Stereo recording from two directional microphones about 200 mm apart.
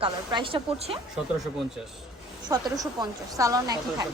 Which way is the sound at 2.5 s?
20° right (ahead or behind).